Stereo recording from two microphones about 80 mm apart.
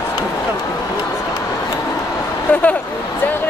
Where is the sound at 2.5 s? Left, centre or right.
Centre.